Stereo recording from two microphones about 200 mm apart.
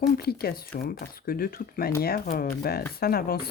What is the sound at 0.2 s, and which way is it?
Speech, 50° left (ahead or behind).